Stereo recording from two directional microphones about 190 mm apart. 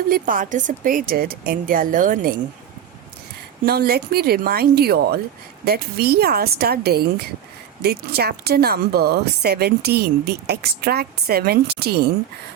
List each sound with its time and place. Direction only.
0.1 s speech: 45° right (ahead or behind)
3.6 s speech: 55° right (ahead or behind)